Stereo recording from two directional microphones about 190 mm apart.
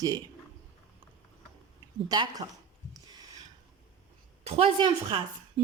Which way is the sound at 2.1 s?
20° right (ahead or behind).